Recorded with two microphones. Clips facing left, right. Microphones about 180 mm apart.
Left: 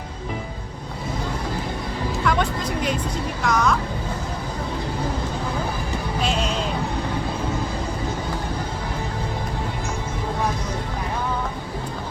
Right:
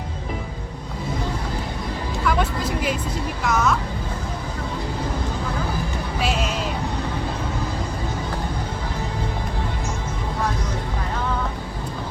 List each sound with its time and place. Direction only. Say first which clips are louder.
2.2 s vehicle: right 1 dB; 5° right (ahead or behind)
3.4 s speech: even; 5° right (ahead or behind)
6.2 s music: even; 5° right (ahead or behind)